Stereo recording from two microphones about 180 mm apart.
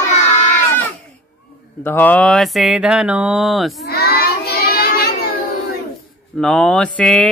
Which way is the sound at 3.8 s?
60° left (ahead or behind).